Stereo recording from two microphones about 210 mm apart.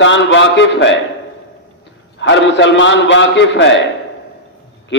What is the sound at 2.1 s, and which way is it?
A man's voice, 60° left (ahead or behind).